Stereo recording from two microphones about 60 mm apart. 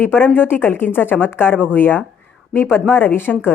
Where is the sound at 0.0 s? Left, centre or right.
Left.